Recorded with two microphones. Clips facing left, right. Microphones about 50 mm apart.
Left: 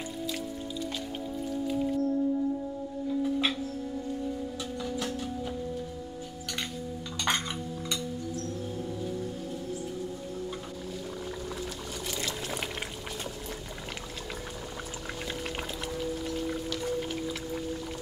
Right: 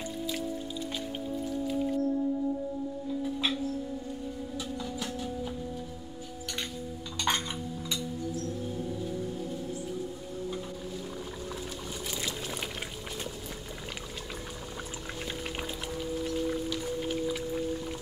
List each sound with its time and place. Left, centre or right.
7.2 s dishes: centre
12.1 s pour: centre
16.3 s music: centre